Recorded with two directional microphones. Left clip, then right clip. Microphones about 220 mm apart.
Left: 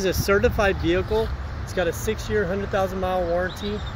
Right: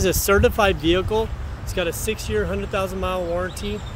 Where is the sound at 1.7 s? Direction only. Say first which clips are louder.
Even; 5° right (ahead or behind).